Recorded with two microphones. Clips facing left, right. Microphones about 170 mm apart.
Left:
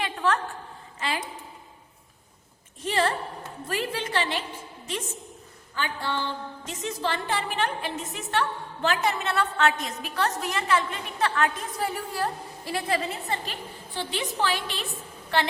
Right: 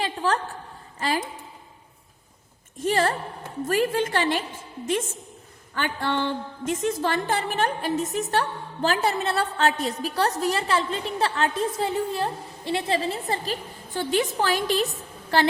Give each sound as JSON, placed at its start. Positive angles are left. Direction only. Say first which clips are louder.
{"t": 0.0, "sound": "a sound", "louder": "right 1 dB", "side_deg": -35}
{"t": 0.9, "sound": "a woman's voice", "louder": "right 5 dB", "side_deg": -40}
{"t": 2.7, "sound": "a woman's voice", "louder": "right 3 dB", "side_deg": -45}
{"t": 5.7, "sound": "a woman's voice", "louder": "right 4 dB", "side_deg": -55}